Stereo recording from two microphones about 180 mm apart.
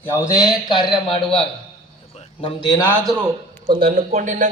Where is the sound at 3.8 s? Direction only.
55° right (ahead or behind).